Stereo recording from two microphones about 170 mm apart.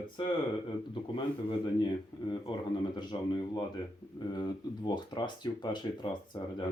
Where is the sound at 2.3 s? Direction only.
25° left (ahead or behind).